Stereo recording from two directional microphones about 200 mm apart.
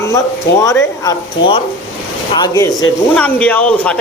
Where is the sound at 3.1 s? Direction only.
5° left (ahead or behind).